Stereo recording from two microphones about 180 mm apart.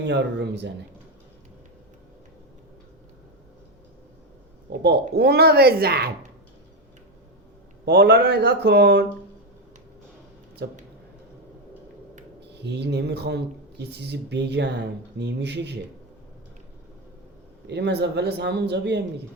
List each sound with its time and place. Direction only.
0.0 s speech: 75° right (ahead or behind)
4.8 s speech: 65° right (ahead or behind)
7.9 s speech: 70° right (ahead or behind)
10.6 s speech: 70° right (ahead or behind)
12.5 s speech: 70° right (ahead or behind)
17.7 s speech: 70° right (ahead or behind)